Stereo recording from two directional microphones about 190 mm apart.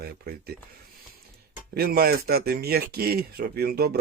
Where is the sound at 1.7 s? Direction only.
55° right (ahead or behind).